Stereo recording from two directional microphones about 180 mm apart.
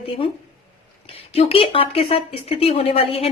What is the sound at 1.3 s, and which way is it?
A woman's voice, 30° left (ahead or behind).